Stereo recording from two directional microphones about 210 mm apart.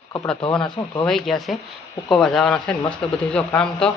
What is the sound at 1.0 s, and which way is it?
A man's voice, centre (ahead or behind).